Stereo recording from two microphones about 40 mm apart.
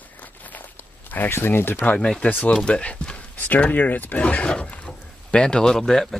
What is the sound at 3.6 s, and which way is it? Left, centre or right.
Speech, left.